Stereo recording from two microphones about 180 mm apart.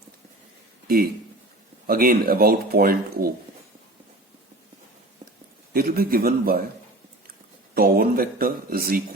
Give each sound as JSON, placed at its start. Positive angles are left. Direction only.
{"t": 1.9, "sound": "speech", "side_deg": -55}
{"t": 5.7, "sound": "speech", "side_deg": -55}
{"t": 7.8, "sound": "speech", "side_deg": -55}